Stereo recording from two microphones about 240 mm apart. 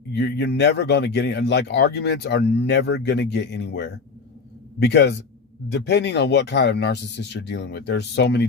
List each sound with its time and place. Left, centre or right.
0.1 s speech: left